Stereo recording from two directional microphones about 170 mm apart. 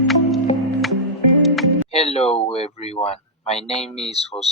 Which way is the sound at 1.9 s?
35° left (ahead or behind).